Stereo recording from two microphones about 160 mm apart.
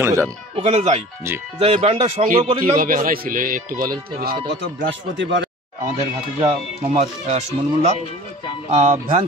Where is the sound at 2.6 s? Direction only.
60° right (ahead or behind).